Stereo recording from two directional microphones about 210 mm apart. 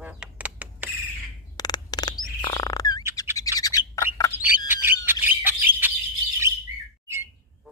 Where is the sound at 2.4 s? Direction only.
20° left (ahead or behind).